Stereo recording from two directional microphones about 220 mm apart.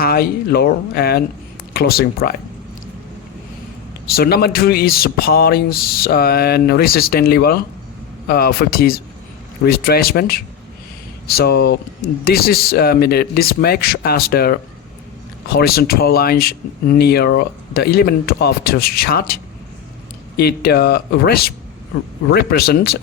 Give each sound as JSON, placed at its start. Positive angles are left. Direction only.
{"t": 0.0, "sound": "speech", "side_deg": 45}
{"t": 4.1, "sound": "speech", "side_deg": 45}